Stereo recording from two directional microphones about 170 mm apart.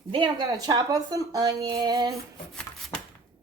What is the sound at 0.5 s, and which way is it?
Speech, 20° right (ahead or behind).